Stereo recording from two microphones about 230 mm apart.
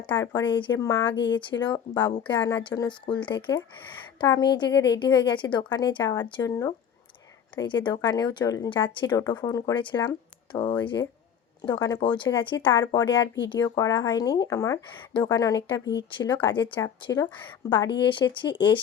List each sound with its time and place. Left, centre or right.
0.1 s speech: centre
13.2 s speech: left
13.5 s speech: centre